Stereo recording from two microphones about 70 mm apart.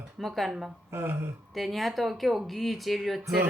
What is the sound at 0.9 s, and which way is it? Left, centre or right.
Speech, right.